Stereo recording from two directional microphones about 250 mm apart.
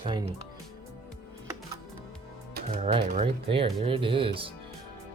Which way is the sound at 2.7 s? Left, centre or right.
Right.